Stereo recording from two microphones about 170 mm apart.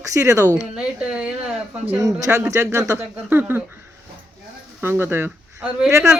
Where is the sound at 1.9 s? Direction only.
20° right (ahead or behind).